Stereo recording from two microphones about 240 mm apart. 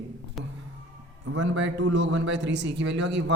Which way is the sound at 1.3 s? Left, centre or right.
Right.